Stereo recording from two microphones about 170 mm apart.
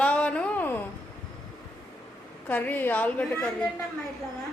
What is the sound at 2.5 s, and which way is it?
A woman's voice, 10° left (ahead or behind).